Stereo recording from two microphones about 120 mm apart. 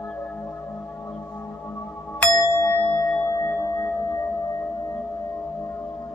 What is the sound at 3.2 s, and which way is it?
Singing bowl, 30° left (ahead or behind).